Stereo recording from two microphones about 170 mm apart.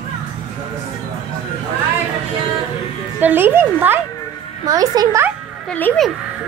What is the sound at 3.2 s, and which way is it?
A child's voice, 10° right (ahead or behind).